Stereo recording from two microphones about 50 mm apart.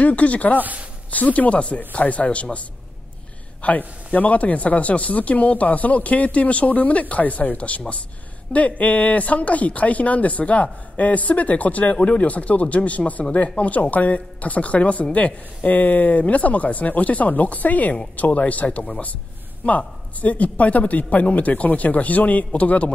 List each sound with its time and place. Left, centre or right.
0.0 s speech: left
0.6 s speech: right
1.1 s speech: left
3.6 s speech: left